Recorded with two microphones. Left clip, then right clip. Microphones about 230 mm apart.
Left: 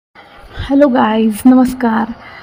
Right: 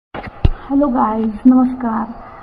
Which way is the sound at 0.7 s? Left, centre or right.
Left.